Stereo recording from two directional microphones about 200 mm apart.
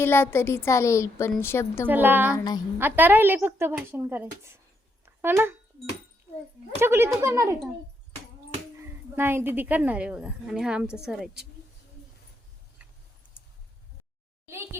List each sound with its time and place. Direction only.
0.0 s a woman's voice: 10° left (ahead or behind)
1.9 s a woman's voice: 10° right (ahead or behind)
2.3 s a woman's voice: 20° left (ahead or behind)
2.7 s a woman's voice: 10° right (ahead or behind)
5.0 s a sound: 10° right (ahead or behind)
6.7 s a woman's voice: 10° right (ahead or behind)
8.8 s speech: 10° right (ahead or behind)